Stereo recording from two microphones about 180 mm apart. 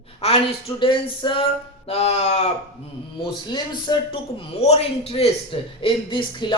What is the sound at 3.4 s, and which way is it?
A man's voice, 25° left (ahead or behind).